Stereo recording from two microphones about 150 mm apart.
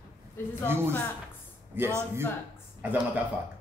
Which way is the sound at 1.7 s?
15° right (ahead or behind).